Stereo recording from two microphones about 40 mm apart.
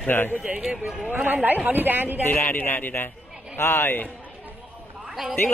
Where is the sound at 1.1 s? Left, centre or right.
Right.